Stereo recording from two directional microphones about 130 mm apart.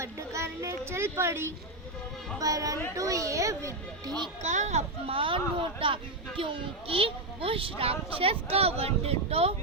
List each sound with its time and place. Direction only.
0.0 s speech: 20° right (ahead or behind)
4.4 s speech: 65° right (ahead or behind)